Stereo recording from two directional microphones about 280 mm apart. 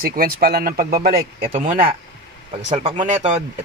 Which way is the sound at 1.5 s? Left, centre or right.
Centre.